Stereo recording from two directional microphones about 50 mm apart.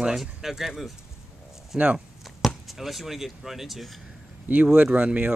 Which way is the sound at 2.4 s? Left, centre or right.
Centre.